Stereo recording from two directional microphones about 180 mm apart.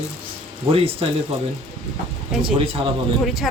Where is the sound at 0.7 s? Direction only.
30° right (ahead or behind).